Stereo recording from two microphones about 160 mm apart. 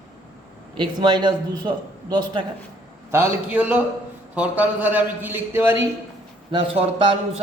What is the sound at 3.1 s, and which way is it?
A man's voice, 15° right (ahead or behind).